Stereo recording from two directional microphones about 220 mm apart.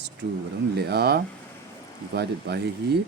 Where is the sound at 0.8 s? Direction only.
50° right (ahead or behind).